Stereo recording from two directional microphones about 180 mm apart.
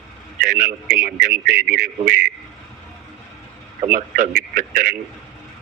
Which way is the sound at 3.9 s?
50° right (ahead or behind).